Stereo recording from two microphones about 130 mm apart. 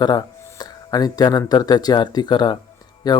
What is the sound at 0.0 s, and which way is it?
Speech, 35° left (ahead or behind).